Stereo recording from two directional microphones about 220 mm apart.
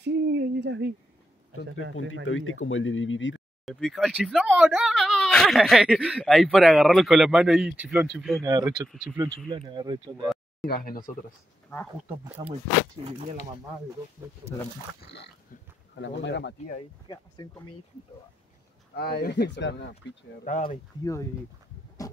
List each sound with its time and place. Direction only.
0.0 s owl: 50° right (ahead or behind)
1.5 s speech: 65° left (ahead or behind)
3.6 s speech: centre (ahead or behind)
8.4 s speech: 15° right (ahead or behind)
8.8 s speech: centre (ahead or behind)
9.5 s speech: 20° right (ahead or behind)
10.6 s speech: 40° left (ahead or behind)
16.0 s speech: 55° left (ahead or behind)
17.1 s speech: 15° left (ahead or behind)
18.9 s speech: 45° left (ahead or behind)
20.4 s speech: 35° left (ahead or behind)
21.0 s speech: 15° left (ahead or behind)